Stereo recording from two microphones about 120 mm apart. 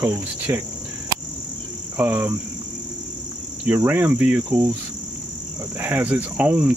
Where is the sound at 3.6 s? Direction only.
15° right (ahead or behind).